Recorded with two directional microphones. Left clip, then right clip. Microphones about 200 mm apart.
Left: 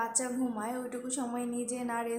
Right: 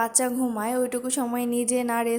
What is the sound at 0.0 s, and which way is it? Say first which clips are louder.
A woman's voice: right 8 dB; 40° right (ahead or behind).